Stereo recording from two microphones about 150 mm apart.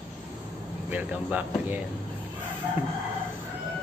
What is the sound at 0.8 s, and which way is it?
Speech, 10° right (ahead or behind).